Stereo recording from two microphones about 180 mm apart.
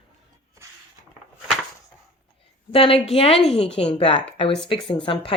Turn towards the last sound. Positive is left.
turn(degrees=30)  # may be behind; listen again after turning